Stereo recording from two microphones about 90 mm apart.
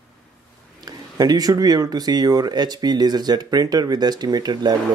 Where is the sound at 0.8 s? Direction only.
45° right (ahead or behind).